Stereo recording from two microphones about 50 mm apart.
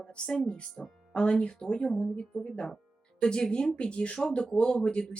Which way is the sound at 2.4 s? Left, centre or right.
Left.